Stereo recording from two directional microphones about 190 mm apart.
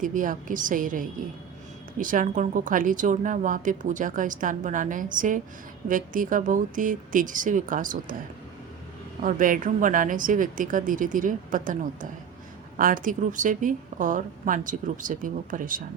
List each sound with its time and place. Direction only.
0.0 s a woman's voice: 45° right (ahead or behind)
9.2 s a woman's voice: 45° right (ahead or behind)